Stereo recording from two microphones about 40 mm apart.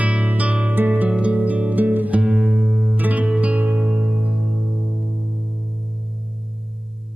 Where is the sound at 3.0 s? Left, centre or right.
Right.